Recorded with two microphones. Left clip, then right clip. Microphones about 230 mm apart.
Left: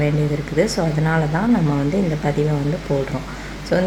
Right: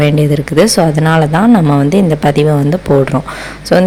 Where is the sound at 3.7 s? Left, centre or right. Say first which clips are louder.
Right 10 dB; right.